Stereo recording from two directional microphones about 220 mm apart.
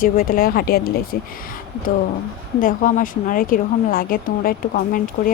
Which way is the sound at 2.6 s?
40° left (ahead or behind).